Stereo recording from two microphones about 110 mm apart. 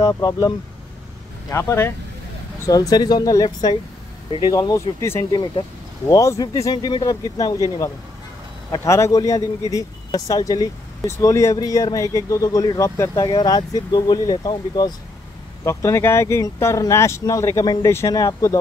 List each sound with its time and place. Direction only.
0.0 s speech: 30° left (ahead or behind)
13.3 s speech: 40° left (ahead or behind)
15.6 s speech: 25° left (ahead or behind)